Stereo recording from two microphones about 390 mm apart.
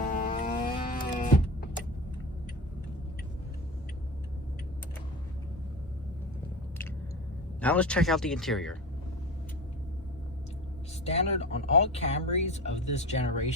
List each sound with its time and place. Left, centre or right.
0.0 s power windows: centre
7.6 s speech: centre
11.0 s speech: centre